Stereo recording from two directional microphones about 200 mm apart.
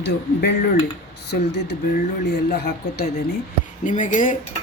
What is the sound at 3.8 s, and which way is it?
Speech, 40° left (ahead or behind).